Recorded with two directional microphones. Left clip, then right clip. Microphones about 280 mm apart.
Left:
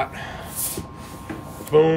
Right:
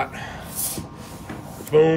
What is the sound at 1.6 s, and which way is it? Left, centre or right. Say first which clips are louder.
Speech: even; centre.